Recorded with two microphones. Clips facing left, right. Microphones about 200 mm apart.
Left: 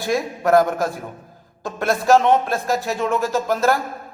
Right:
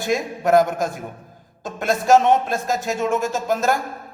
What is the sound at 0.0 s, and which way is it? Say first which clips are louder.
Speech: left 1 dB; 20° right (ahead or behind).